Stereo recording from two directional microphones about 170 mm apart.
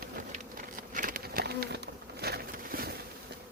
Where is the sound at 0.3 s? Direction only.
55° right (ahead or behind).